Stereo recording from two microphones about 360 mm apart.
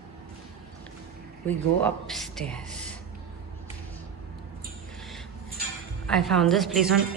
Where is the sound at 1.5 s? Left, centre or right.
Centre.